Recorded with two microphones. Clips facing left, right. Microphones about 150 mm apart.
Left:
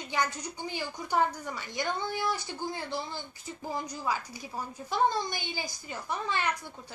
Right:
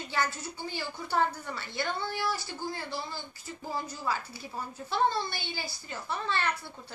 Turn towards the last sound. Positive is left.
turn(degrees=15)  # may be behind; listen again after turning